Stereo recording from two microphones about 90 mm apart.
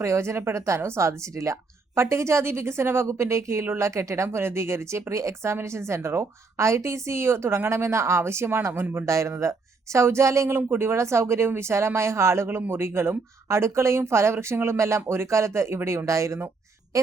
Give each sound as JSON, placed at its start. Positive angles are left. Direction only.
{"t": 0.0, "sound": "a woman's voice", "side_deg": -30}